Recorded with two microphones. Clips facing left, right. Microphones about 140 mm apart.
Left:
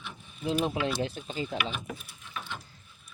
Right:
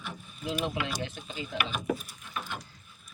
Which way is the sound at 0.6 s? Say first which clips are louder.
Left 3 dB; 35° left (ahead or behind).